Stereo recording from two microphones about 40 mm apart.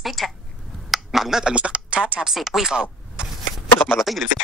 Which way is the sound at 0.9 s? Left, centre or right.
Centre.